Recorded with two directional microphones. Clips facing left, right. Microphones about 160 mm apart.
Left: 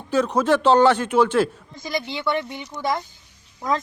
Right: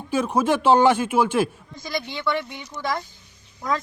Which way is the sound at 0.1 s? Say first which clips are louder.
Left 2 dB; 10° right (ahead or behind).